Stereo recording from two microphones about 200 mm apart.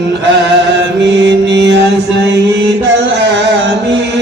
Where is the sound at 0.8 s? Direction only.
60° right (ahead or behind).